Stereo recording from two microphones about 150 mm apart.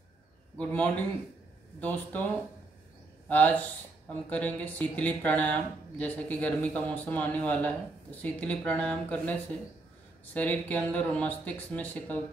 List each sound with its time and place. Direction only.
0.6 s speech: 10° left (ahead or behind)
3.3 s speech: 10° left (ahead or behind)
10.3 s speech: 10° left (ahead or behind)